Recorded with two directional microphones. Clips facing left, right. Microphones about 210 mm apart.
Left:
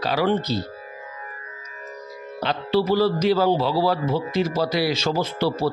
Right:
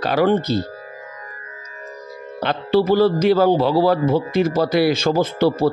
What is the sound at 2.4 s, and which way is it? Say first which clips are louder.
A man's voice: right 4 dB; 55° right (ahead or behind).